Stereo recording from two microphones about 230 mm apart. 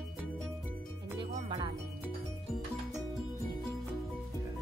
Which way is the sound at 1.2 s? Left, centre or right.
Centre.